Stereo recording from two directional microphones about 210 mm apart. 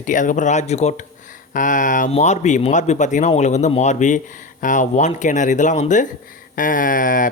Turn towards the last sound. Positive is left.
turn(degrees=40)  # may be behind; listen again after turning